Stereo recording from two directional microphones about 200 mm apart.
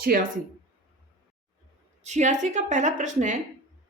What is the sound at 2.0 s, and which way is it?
Speech, 35° right (ahead or behind).